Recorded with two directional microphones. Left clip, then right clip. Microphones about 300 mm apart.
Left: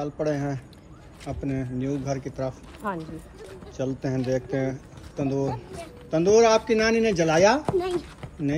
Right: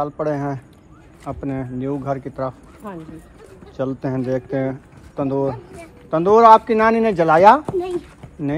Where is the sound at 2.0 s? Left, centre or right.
Centre.